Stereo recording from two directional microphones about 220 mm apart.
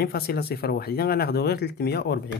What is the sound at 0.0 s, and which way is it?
Speech, 45° left (ahead or behind).